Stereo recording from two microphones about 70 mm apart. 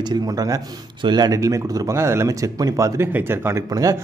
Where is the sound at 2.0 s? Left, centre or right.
Right.